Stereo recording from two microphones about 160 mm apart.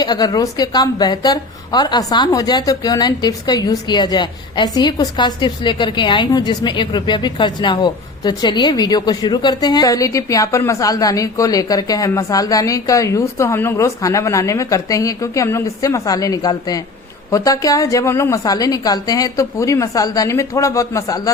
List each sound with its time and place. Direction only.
0.0 s a woman's voice: 25° left (ahead or behind)